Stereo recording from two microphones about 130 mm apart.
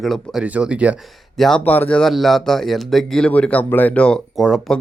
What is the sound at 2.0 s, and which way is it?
Speech, centre (ahead or behind).